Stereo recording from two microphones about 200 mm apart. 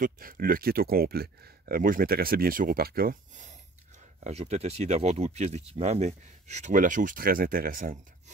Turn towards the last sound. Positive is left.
turn(degrees=-45)  # may be behind; listen again after turning